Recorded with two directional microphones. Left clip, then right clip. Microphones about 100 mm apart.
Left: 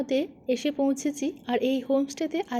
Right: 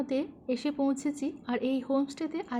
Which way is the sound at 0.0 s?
30° left (ahead or behind).